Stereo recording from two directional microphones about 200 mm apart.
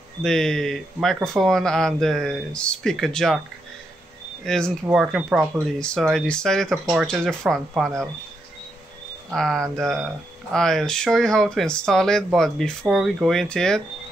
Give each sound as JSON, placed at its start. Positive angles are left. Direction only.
{"t": 0.2, "sound": "speech", "side_deg": 5}
{"t": 4.5, "sound": "speech", "side_deg": 5}
{"t": 9.3, "sound": "speech", "side_deg": 0}